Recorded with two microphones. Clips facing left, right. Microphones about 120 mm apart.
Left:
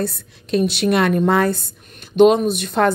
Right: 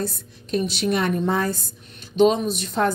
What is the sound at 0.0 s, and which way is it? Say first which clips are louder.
A woman's voice: left 4 dB; 70° left (ahead or behind).